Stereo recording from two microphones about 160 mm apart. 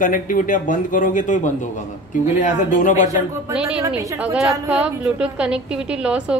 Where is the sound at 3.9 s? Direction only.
10° right (ahead or behind).